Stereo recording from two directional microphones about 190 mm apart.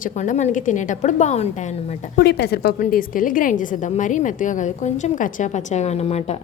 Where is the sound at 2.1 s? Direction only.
60° left (ahead or behind).